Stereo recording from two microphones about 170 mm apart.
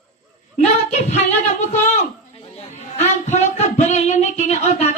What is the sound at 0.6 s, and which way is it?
A woman's voice, 40° left (ahead or behind).